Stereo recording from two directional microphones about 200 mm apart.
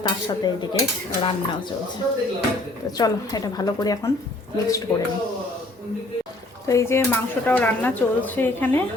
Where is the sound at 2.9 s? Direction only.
20° left (ahead or behind).